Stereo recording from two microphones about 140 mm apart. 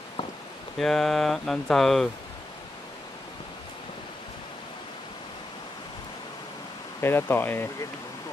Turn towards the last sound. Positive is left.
turn(degrees=15)  # may be behind; listen again after turning